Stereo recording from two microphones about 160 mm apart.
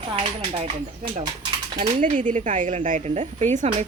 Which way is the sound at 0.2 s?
35° right (ahead or behind).